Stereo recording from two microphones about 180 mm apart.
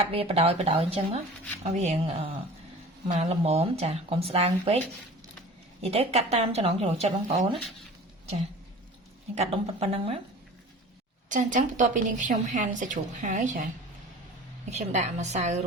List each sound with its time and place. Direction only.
0.0 s speech: 35° right (ahead or behind)
5.8 s speech: 35° right (ahead or behind)
9.3 s speech: 35° right (ahead or behind)
11.3 s a woman's voice: 45° right (ahead or behind)
14.7 s speech: 40° right (ahead or behind)